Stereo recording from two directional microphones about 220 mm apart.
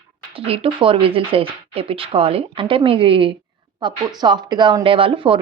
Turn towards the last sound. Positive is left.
turn(degrees=-25)  # may be behind; listen again after turning